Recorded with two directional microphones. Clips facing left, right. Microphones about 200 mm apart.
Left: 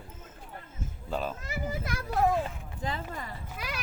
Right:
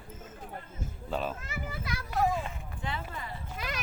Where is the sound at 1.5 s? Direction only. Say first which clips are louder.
Left 4 dB; 45° left (ahead or behind).